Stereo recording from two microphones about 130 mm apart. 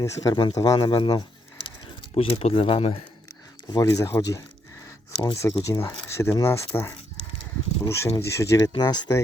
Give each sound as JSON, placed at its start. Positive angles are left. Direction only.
{"t": 0.0, "sound": "speech", "side_deg": 30}
{"t": 2.1, "sound": "speech", "side_deg": 50}
{"t": 3.7, "sound": "speech", "side_deg": 25}
{"t": 5.1, "sound": "speech", "side_deg": 40}
{"t": 5.4, "sound": "speech", "side_deg": 25}
{"t": 8.0, "sound": "speech", "side_deg": 20}
{"t": 8.7, "sound": "speech", "side_deg": 35}